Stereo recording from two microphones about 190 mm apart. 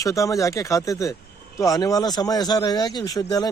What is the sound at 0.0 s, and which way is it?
Speech, 15° left (ahead or behind).